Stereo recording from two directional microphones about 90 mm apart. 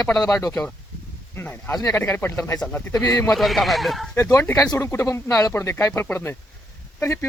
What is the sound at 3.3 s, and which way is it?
Speech, centre (ahead or behind).